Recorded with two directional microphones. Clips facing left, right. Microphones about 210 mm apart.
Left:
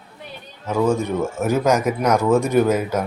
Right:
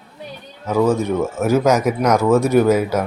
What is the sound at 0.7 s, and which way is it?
Speech, 5° right (ahead or behind).